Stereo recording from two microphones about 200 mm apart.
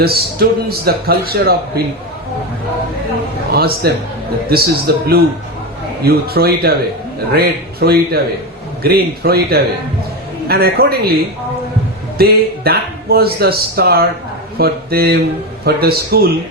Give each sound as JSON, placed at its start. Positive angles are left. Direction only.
{"t": 0.0, "sound": "speech", "side_deg": -50}
{"t": 3.5, "sound": "speech", "side_deg": -50}